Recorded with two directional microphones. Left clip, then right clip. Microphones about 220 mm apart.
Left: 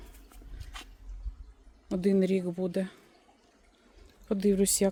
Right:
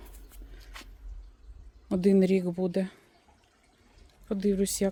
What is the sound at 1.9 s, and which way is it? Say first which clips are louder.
A woman's voice: right 3 dB; 15° right (ahead or behind).